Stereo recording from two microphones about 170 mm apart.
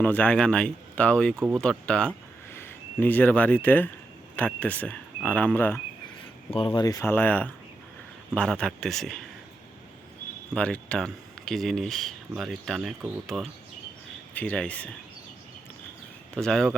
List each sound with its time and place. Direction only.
0.0 s speech: 10° left (ahead or behind)
6.5 s speech: 30° left (ahead or behind); by 9.2 s centre (ahead or behind)
10.5 s speech: 5° left (ahead or behind)
16.3 s speech: 5° left (ahead or behind)